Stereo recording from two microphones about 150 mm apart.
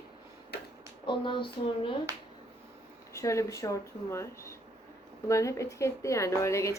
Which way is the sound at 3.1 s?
20° left (ahead or behind).